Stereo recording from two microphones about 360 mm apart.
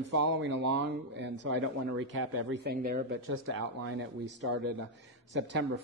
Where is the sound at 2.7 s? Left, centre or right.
Right.